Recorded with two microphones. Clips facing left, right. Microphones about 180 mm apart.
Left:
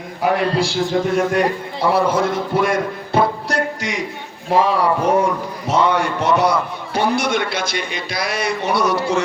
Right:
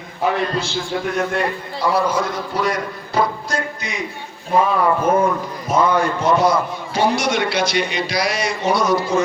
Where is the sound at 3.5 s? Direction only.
80° left.